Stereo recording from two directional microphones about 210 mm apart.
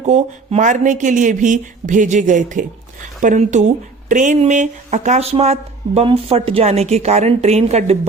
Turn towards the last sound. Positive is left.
turn(degrees=-30)  # may be behind; listen again after turning